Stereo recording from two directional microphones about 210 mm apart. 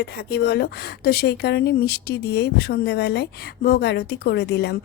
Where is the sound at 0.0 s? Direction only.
50° left (ahead or behind).